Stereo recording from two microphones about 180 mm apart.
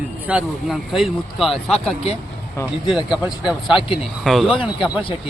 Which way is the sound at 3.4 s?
Centre (ahead or behind).